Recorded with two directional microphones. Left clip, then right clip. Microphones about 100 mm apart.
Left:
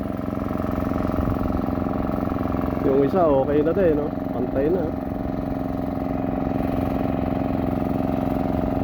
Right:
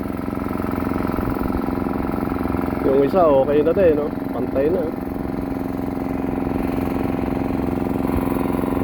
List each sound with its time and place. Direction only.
2.9 s speech: 25° left (ahead or behind)